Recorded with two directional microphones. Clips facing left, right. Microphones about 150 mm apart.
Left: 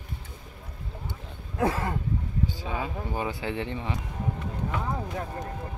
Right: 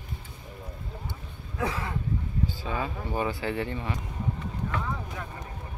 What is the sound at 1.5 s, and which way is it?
Speech, 45° left (ahead or behind).